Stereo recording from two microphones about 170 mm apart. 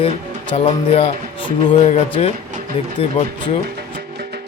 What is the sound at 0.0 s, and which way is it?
Speech, 35° left (ahead or behind).